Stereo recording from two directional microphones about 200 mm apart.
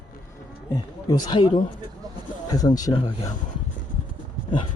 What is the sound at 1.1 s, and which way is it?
A man's voice, 20° left (ahead or behind).